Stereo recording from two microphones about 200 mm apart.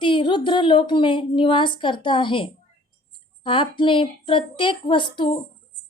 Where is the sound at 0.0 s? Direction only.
25° left (ahead or behind).